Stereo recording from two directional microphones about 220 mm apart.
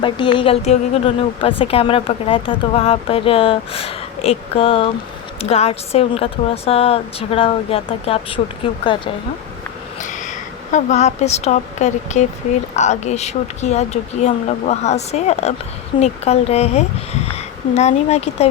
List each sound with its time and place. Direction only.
0.0 s a woman's voice: 20° left (ahead or behind)
10.0 s a woman's voice: 35° left (ahead or behind)